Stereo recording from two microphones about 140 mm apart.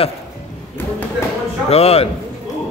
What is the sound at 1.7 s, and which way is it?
Speech, 45° left (ahead or behind).